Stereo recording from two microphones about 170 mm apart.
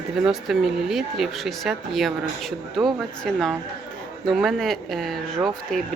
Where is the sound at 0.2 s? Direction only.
5° right (ahead or behind).